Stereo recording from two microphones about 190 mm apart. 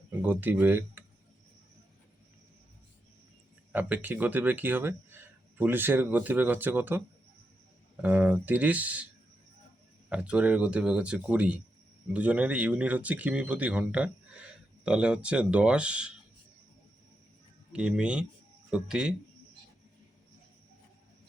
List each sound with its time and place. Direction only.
0.1 s speech: 10° right (ahead or behind)
3.7 s speech: 10° right (ahead or behind)
8.0 s speech: 10° right (ahead or behind)
10.1 s speech: 5° right (ahead or behind)
17.7 s speech: 5° right (ahead or behind)